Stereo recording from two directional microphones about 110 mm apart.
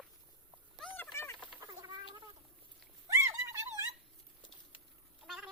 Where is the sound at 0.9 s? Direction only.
20° left (ahead or behind).